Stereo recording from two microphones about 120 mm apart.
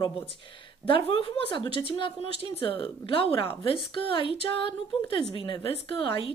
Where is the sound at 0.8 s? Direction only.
50° left (ahead or behind).